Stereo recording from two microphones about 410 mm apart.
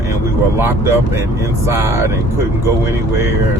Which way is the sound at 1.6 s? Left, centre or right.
Centre.